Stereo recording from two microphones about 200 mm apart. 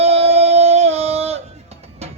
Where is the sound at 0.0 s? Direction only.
30° right (ahead or behind).